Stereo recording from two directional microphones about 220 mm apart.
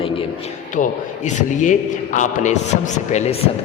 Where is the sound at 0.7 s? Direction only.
35° left (ahead or behind).